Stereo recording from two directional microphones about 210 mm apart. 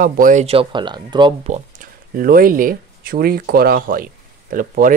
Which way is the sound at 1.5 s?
40° right (ahead or behind).